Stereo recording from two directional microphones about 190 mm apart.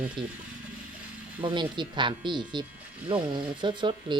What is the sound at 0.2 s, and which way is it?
Speech, centre (ahead or behind).